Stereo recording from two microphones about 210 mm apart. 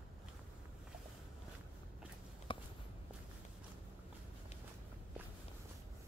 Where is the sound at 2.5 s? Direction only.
25° left (ahead or behind).